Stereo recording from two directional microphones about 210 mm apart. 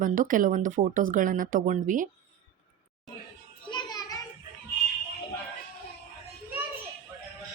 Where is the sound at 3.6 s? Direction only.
20° left (ahead or behind).